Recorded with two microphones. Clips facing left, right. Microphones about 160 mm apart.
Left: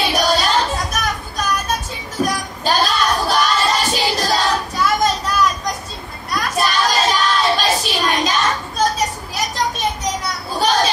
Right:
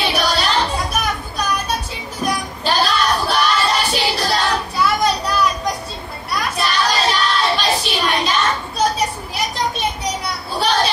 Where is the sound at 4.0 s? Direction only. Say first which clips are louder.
Left 1 dB; 40° left (ahead or behind).